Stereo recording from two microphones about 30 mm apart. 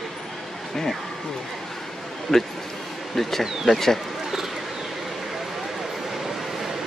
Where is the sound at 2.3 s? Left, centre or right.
Centre.